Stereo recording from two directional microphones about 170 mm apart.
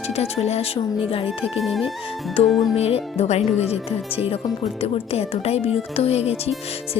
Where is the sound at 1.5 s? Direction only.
Centre (ahead or behind).